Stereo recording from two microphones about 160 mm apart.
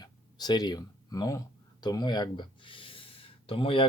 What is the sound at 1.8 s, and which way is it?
Speech, 25° left (ahead or behind).